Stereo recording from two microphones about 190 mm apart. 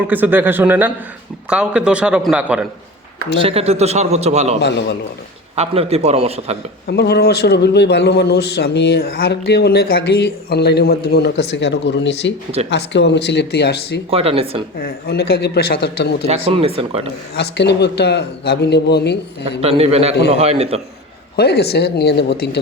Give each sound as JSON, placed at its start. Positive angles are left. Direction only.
{"t": 0.1, "sound": "a man's voice", "side_deg": -10}
{"t": 3.4, "sound": "a man's voice", "side_deg": -30}
{"t": 4.6, "sound": "a man's voice", "side_deg": 65}
{"t": 5.5, "sound": "a man's voice", "side_deg": -30}
{"t": 6.8, "sound": "a man's voice", "side_deg": 60}
{"t": 14.1, "sound": "a man's voice", "side_deg": -30}
{"t": 14.8, "sound": "a man's voice", "side_deg": 55}
{"t": 16.2, "sound": "a man's voice", "side_deg": -30}
{"t": 17.3, "sound": "a man's voice", "side_deg": 60}
{"t": 19.6, "sound": "a man's voice", "side_deg": -30}
{"t": 21.3, "sound": "a man's voice", "side_deg": 60}